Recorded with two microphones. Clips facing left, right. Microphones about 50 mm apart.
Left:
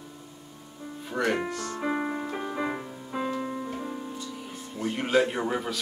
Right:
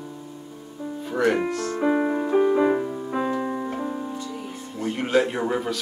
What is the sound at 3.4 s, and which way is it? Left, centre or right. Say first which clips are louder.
Keyboard: right 6 dB; right.